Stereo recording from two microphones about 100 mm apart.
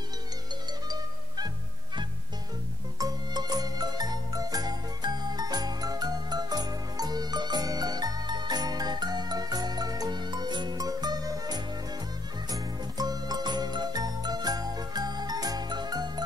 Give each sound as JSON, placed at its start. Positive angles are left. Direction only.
{"t": 3.0, "sound": "music", "side_deg": -40}
{"t": 12.4, "sound": "jingle", "side_deg": -40}